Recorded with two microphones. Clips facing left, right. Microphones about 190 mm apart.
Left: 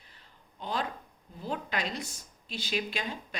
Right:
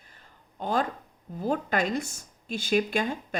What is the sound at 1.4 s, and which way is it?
Speech, 45° right (ahead or behind).